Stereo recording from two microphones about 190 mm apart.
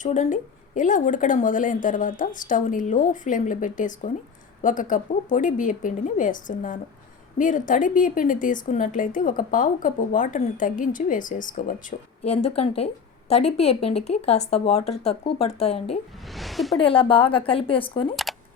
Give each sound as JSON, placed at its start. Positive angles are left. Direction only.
{"t": 0.0, "sound": "a woman's voice", "side_deg": 40}
{"t": 16.3, "sound": "speech", "side_deg": 0}
{"t": 16.8, "sound": "speech", "side_deg": 30}